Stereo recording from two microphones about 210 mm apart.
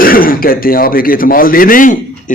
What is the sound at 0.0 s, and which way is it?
A man's voice, 45° left (ahead or behind).